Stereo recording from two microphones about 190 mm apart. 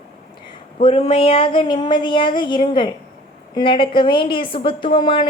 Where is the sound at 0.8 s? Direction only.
30° left (ahead or behind).